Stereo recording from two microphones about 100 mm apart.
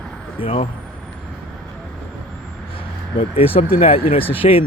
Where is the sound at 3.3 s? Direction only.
70° left (ahead or behind).